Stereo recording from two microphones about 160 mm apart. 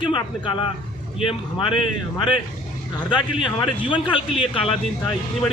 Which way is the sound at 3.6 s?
30° left (ahead or behind).